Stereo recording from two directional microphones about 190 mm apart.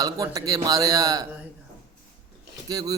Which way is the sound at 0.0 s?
20° right (ahead or behind).